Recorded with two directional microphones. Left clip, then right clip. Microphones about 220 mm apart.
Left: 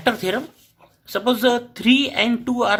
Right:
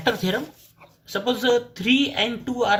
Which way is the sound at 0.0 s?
40° left (ahead or behind).